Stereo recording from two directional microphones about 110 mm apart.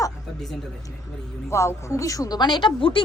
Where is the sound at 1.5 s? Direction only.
25° left (ahead or behind); by 3.0 s 50° left (ahead or behind).